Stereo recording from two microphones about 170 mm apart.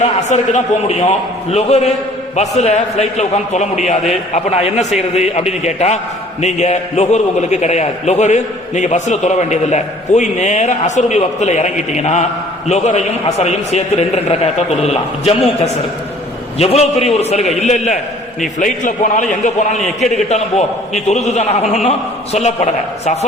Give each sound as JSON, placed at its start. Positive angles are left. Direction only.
{"t": 0.0, "sound": "a man's voice", "side_deg": 45}